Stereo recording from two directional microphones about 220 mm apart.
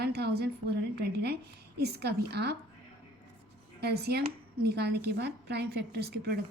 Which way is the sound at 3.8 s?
45° right (ahead or behind).